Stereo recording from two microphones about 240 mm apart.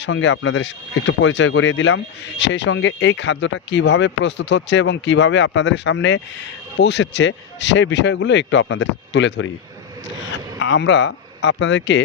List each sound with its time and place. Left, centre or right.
0.0 s speech: left
10.6 s speech: left